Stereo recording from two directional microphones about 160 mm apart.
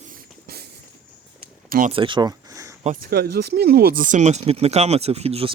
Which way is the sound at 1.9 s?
30° right (ahead or behind).